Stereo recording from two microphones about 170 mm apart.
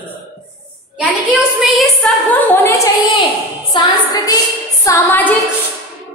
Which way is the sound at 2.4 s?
15° left (ahead or behind).